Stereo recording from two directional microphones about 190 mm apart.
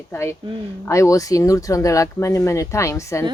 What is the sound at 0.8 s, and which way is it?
Speech, 15° left (ahead or behind).